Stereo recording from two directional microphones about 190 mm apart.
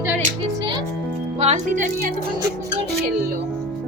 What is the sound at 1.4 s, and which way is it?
Speech, 40° right (ahead or behind).